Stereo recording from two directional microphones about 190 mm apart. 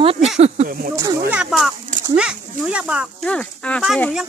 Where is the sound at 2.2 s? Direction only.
5° right (ahead or behind).